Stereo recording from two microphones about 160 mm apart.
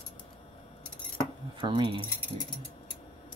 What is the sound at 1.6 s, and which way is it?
Speech, 30° right (ahead or behind).